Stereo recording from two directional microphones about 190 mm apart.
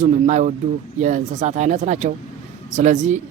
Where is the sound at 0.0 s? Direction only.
40° right (ahead or behind).